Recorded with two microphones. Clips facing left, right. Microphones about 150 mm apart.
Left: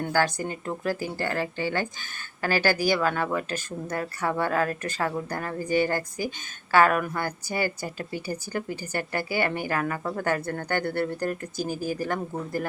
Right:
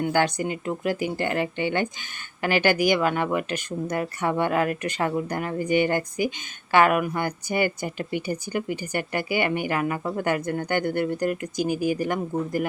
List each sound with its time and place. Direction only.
0.0 s speech: 20° right (ahead or behind)